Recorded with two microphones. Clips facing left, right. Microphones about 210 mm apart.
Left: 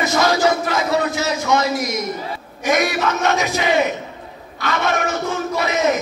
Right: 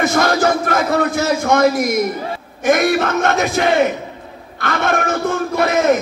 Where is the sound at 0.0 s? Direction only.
55° right (ahead or behind).